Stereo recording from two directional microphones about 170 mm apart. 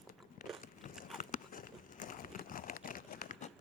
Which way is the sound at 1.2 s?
55° left (ahead or behind).